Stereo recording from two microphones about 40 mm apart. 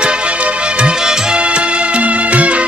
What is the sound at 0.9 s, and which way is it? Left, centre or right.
Music, centre.